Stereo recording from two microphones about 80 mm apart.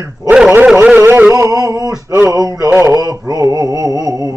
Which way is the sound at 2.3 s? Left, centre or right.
Right.